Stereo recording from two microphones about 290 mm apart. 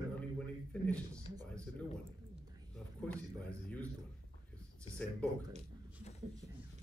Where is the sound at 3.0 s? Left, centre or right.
Centre.